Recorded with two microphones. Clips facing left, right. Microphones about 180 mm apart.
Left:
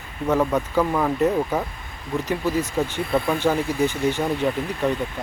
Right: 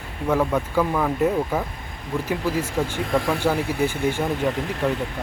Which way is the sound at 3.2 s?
85° right.